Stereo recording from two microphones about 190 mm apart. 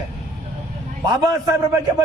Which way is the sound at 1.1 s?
20° right (ahead or behind).